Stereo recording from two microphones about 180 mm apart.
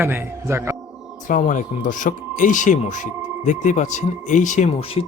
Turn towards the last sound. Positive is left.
turn(degrees=35)  # may be behind; listen again after turning